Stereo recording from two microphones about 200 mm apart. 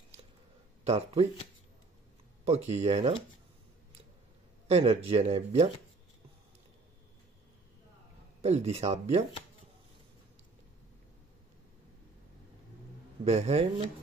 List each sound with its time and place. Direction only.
0.8 s speech: 30° right (ahead or behind)
2.4 s speech: 35° right (ahead or behind)
4.6 s speech: 30° right (ahead or behind)
8.4 s speech: 30° right (ahead or behind)
13.2 s speech: 35° right (ahead or behind)